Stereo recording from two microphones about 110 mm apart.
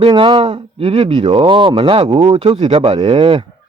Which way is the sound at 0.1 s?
45° right (ahead or behind).